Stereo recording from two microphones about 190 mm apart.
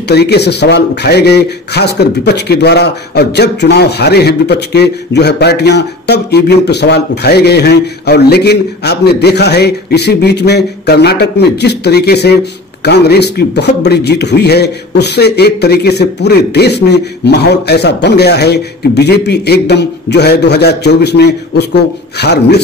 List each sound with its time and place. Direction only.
0.1 s a man's voice: 60° left (ahead or behind)